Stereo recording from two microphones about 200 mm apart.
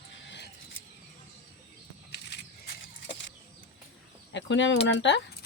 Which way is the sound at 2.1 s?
55° left (ahead or behind).